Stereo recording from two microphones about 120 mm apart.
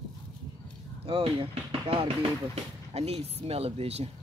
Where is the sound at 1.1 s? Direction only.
50° right (ahead or behind).